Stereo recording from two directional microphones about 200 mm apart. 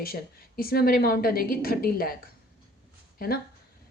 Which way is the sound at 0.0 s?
45° left (ahead or behind).